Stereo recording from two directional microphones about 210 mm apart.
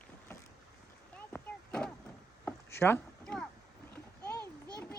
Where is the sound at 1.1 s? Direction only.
5° left (ahead or behind).